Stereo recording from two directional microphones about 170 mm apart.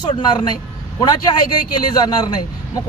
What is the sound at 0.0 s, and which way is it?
A man's voice, 25° left (ahead or behind).